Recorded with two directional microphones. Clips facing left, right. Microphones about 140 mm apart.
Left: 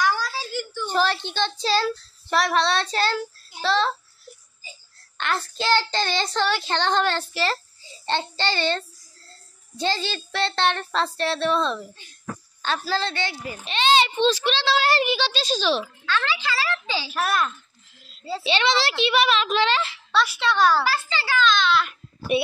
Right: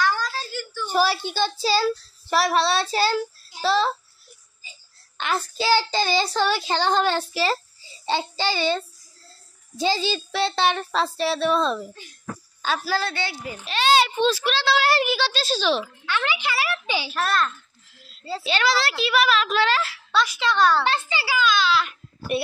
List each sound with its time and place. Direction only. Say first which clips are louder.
0.0 s a sound: even; 10° left (ahead or behind)
0.8 s a child's voice: right 2 dB; 10° right (ahead or behind)
3.6 s child singing: right 1 dB; 10° right (ahead or behind)
5.1 s child singing: right 1 dB; 10° right (ahead or behind)
17.1 s a child's voice: left 1 dB; 10° left (ahead or behind)
21.1 s a child's voice: left 1 dB; 10° right (ahead or behind)